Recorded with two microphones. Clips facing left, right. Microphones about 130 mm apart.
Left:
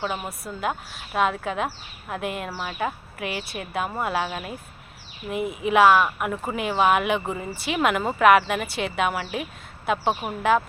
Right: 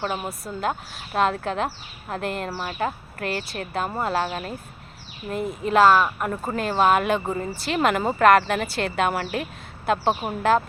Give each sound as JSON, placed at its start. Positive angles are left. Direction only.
{"t": 0.0, "sound": "speech", "side_deg": -5}
{"t": 2.5, "sound": "speech", "side_deg": -5}